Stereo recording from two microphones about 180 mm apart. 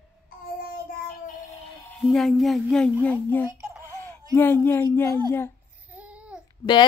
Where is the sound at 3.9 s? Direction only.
15° left (ahead or behind).